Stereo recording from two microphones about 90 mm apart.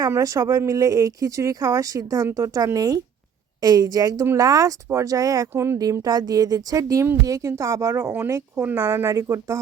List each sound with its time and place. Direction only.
0.1 s a woman's voice: 35° right (ahead or behind)